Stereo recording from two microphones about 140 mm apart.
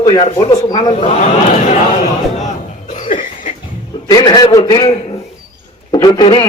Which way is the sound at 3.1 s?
75° left (ahead or behind).